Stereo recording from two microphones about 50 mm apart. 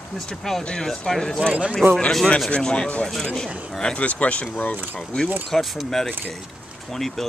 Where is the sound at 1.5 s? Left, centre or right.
Right.